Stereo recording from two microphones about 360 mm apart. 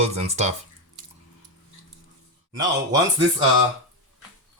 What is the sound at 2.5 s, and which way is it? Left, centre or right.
Speech, centre.